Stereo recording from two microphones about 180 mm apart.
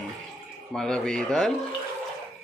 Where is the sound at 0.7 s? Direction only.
5° left (ahead or behind).